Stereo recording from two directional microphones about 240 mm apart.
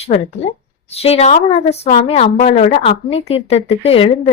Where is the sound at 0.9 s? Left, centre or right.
Left.